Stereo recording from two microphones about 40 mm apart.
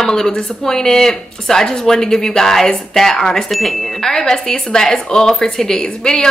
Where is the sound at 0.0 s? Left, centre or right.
Centre.